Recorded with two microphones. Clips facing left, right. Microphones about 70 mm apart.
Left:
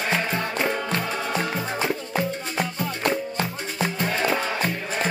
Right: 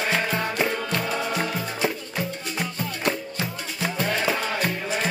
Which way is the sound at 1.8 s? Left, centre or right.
Left.